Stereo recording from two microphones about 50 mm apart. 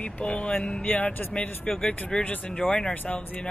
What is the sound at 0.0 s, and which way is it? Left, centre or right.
Speech, left.